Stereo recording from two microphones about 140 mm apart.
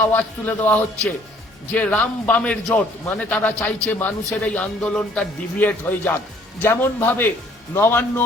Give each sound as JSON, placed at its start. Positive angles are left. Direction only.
{"t": 0.1, "sound": "a man's voice", "side_deg": 15}